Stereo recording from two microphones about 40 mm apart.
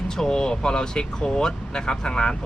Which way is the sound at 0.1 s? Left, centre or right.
Centre.